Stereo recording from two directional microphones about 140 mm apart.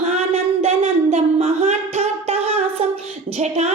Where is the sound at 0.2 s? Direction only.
45° right (ahead or behind).